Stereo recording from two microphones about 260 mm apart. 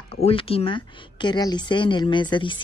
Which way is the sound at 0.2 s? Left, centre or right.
Left.